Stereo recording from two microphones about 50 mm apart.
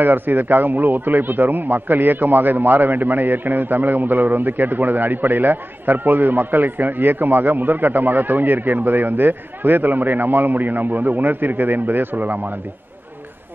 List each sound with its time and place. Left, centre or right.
0.0 s speech: right